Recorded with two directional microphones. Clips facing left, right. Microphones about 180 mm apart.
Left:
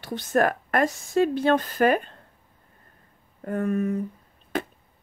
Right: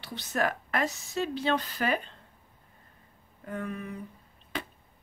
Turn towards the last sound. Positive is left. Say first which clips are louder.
# left 8 dB
turn(degrees=45)  # may be behind; listen again after turning